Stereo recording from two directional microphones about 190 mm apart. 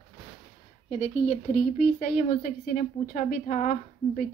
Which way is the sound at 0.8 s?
35° left (ahead or behind).